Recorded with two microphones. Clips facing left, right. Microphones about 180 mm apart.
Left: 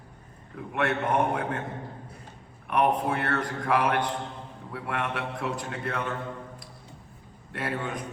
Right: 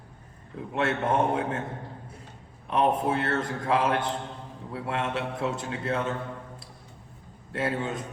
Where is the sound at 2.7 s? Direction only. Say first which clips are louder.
Even; 25° right (ahead or behind).